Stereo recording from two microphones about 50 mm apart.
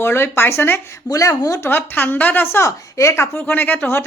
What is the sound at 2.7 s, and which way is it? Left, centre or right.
Speech, left.